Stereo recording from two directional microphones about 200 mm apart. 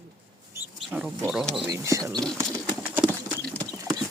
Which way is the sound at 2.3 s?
15° right (ahead or behind).